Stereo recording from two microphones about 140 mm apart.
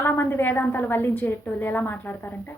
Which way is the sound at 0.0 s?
15° left (ahead or behind).